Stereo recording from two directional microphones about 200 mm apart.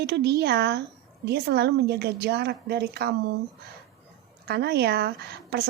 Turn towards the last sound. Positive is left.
turn(degrees=-55)  # may be behind; listen again after turning